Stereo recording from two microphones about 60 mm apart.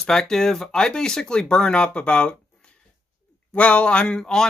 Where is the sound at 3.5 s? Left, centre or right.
Centre.